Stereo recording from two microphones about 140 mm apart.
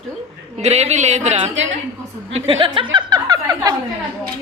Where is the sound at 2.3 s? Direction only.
40° right (ahead or behind); by 3.7 s 25° right (ahead or behind).